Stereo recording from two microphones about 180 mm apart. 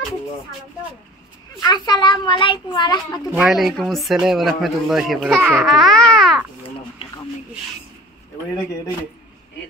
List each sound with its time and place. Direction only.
1.6 s a child's voice: 25° left (ahead or behind)
3.3 s speech: 5° right (ahead or behind)
5.5 s babbling: centre (ahead or behind)